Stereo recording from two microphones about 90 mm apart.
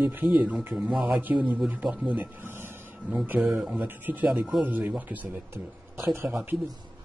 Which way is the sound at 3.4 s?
5° right (ahead or behind).